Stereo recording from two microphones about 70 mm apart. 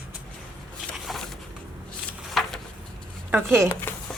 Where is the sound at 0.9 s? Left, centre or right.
Centre.